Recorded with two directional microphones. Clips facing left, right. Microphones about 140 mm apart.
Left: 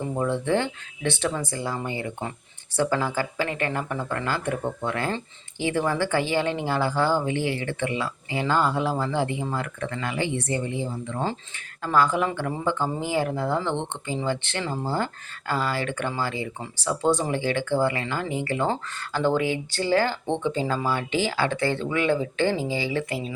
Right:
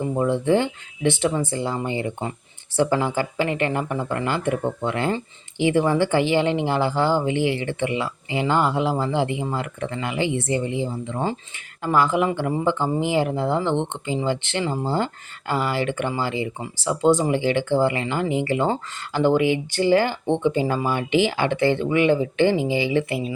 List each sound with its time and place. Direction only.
0.2 s speech: 15° right (ahead or behind)